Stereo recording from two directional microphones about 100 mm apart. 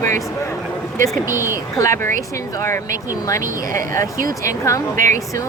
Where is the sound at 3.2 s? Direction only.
35° left (ahead or behind).